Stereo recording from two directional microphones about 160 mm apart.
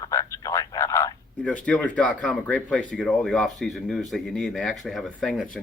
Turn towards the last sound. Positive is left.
turn(degrees=0)  # may be behind; listen again after turning